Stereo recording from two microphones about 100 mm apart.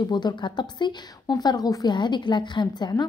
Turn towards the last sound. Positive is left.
turn(degrees=45)  # may be behind; listen again after turning